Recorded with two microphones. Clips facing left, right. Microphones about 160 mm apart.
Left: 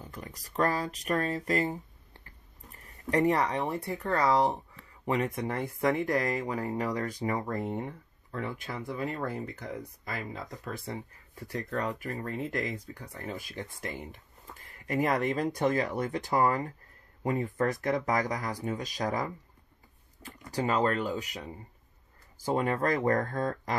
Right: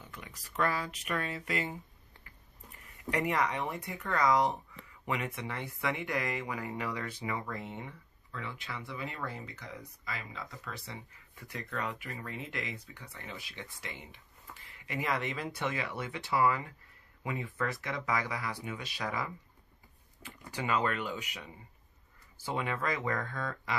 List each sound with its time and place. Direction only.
0.0 s speech: 35° left (ahead or behind)